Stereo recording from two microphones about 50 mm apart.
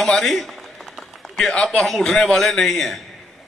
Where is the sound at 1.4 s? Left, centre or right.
Centre.